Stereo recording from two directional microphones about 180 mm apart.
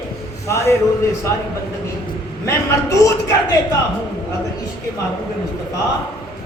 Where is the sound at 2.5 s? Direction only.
15° left (ahead or behind).